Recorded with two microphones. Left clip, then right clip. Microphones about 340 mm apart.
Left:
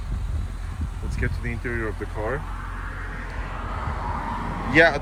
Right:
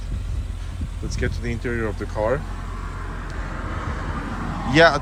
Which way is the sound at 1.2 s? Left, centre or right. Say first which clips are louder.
Right 2 dB; centre.